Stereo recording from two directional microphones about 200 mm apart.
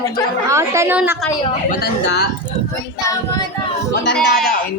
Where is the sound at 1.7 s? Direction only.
55° left (ahead or behind).